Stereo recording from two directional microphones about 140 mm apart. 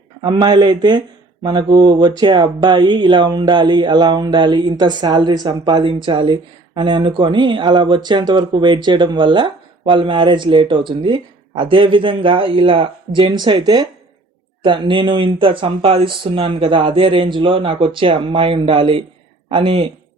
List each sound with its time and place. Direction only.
0.2 s speech: 30° right (ahead or behind)